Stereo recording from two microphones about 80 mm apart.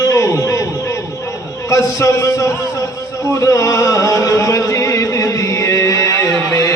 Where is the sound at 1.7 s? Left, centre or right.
Left.